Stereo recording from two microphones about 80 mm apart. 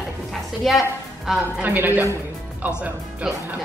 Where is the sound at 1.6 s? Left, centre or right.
Right.